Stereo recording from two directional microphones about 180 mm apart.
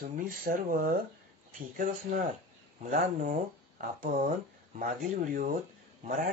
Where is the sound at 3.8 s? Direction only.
50° right (ahead or behind).